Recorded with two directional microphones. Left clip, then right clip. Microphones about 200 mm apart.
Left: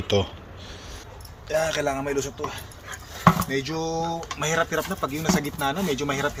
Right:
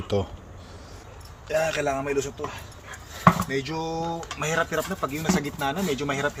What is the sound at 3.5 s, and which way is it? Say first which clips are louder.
Speech: left 1 dB; centre (ahead or behind).